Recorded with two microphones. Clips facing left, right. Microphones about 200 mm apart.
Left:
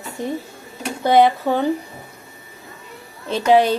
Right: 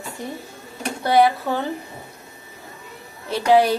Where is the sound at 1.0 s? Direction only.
20° left (ahead or behind).